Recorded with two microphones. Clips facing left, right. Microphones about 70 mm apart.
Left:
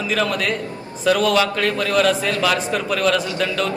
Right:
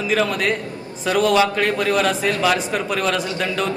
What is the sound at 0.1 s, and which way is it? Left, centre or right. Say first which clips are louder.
A man's voice: right 2 dB; centre.